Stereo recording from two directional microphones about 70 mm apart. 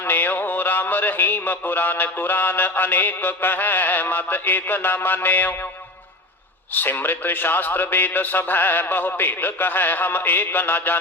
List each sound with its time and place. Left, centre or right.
0.0 s music: left
6.7 s music: left